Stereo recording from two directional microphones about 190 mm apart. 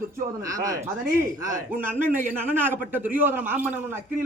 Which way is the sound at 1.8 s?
45° right (ahead or behind).